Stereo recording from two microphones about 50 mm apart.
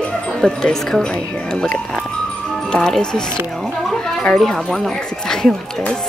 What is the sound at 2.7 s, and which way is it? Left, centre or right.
Music, centre.